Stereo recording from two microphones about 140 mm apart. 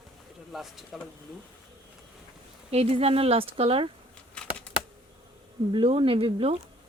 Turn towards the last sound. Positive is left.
turn(degrees=-45)  # may be behind; listen again after turning